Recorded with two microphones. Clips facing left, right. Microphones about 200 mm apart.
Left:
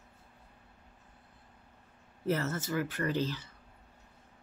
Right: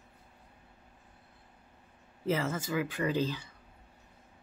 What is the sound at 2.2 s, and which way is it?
Speech, 90° right.